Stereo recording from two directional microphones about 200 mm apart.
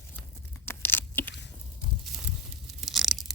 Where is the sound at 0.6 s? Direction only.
10° left (ahead or behind).